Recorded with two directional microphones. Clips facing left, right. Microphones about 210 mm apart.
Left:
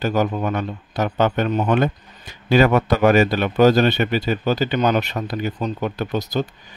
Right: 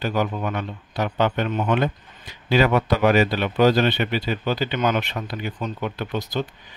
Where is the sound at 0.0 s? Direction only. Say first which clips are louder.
Left 4 dB; 45° left (ahead or behind).